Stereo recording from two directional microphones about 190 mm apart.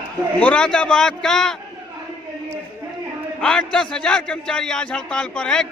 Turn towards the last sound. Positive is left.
turn(degrees=5)  # may be behind; listen again after turning